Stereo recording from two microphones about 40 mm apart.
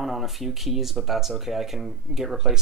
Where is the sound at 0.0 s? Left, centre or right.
Centre.